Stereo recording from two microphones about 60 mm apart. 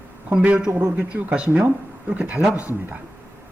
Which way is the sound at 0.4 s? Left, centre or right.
Centre.